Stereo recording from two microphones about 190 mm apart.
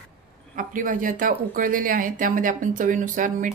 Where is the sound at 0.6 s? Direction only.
45° right (ahead or behind).